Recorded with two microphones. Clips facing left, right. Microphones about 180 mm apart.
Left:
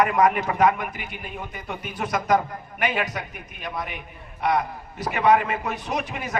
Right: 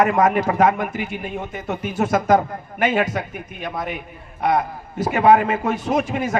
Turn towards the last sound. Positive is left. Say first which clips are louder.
# right 8 dB
turn(degrees=-50)  # may be behind; listen again after turning